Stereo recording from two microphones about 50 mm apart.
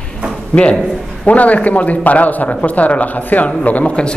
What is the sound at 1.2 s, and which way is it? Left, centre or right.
A man's voice, left.